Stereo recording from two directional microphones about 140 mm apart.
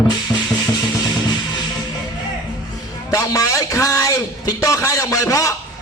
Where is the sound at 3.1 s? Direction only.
25° left (ahead or behind).